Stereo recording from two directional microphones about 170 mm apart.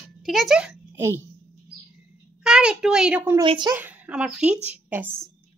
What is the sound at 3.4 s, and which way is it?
Speech, 25° right (ahead or behind).